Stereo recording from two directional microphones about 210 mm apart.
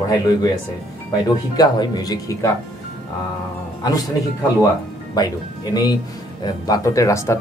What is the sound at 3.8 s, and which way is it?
Speech, 15° left (ahead or behind).